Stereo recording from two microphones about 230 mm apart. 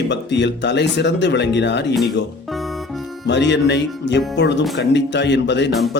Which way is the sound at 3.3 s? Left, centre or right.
Left.